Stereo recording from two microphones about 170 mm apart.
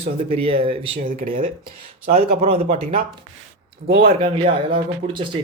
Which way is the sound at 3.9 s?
35° right (ahead or behind).